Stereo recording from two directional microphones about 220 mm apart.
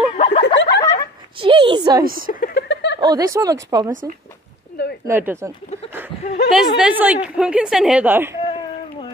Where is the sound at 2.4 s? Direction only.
50° left (ahead or behind).